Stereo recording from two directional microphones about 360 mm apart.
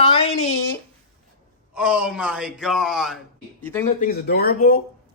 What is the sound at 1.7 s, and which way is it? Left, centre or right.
Speech, centre.